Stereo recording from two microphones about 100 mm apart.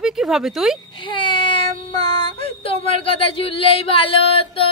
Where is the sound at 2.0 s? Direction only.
65° left (ahead or behind).